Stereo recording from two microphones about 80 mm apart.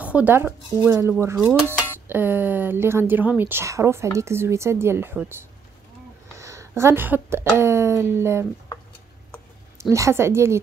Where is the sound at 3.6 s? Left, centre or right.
Right.